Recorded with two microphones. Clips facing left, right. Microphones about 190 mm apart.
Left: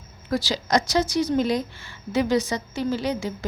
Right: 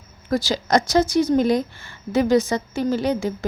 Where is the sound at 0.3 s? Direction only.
45° right (ahead or behind).